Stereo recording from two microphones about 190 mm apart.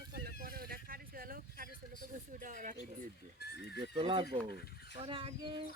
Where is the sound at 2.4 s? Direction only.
40° right (ahead or behind).